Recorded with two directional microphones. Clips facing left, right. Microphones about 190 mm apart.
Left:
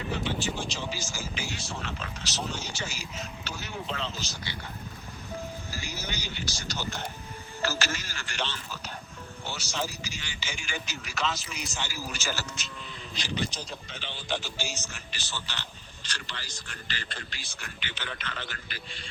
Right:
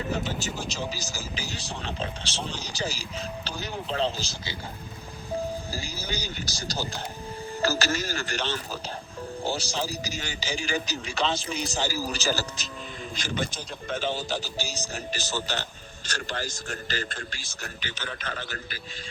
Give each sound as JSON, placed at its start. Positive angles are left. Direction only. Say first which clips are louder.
{"t": 0.1, "sound": "a man's voice", "louder": "right 1 dB", "side_deg": -40}
{"t": 5.7, "sound": "a man's voice", "louder": "right 3 dB", "side_deg": -35}
{"t": 13.1, "sound": "speech", "louder": "right 1 dB", "side_deg": -50}